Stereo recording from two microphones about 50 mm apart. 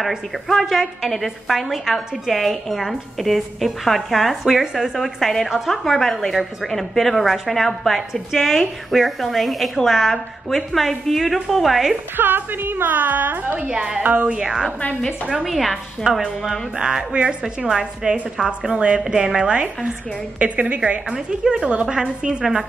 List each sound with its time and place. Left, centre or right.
0.5 s a woman's voice: centre
12.2 s a woman's voice: right
13.6 s a woman's voice: centre
14.0 s a woman's voice: right
14.4 s a woman's voice: centre
15.4 s a woman's voice: centre
16.1 s a woman's voice: centre; by 21.0 s right
21.1 s a woman's voice: centre
22.4 s a woman's voice: centre